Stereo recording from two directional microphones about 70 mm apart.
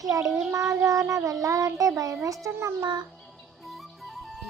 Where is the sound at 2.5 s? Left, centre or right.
Right.